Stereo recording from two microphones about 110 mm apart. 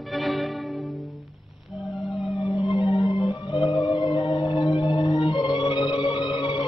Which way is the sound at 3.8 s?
60° left (ahead or behind).